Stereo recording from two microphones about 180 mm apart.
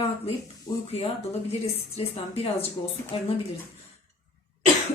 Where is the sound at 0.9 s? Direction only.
35° left (ahead or behind).